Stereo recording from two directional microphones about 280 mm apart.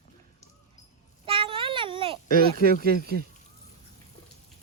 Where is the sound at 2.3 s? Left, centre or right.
Right.